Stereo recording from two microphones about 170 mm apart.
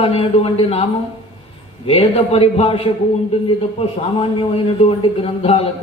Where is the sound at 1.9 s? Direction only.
35° left (ahead or behind).